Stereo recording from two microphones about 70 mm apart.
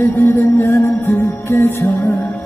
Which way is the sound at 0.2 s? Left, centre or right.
Left.